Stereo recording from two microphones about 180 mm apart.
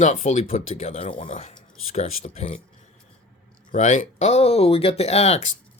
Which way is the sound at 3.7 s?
40° left (ahead or behind).